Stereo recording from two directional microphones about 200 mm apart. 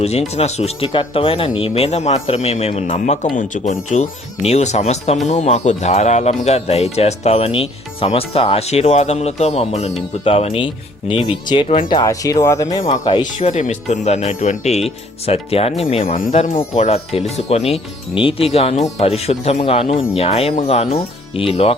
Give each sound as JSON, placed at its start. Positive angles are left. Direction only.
{"t": 0.0, "sound": "speech", "side_deg": 30}
{"t": 13.5, "sound": "speech", "side_deg": 35}
{"t": 16.0, "sound": "speech", "side_deg": 45}